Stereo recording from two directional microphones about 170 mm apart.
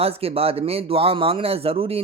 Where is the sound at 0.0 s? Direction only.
35° right (ahead or behind).